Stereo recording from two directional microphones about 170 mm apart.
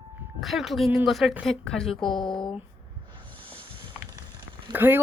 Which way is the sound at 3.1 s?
30° right (ahead or behind).